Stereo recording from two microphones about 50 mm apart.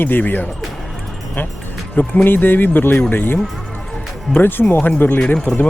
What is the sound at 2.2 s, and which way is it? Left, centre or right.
Speech, left.